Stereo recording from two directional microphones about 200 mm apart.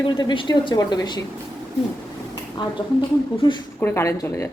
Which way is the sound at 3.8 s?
10° left (ahead or behind).